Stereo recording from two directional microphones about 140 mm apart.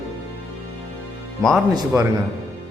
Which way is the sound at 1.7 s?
25° right (ahead or behind).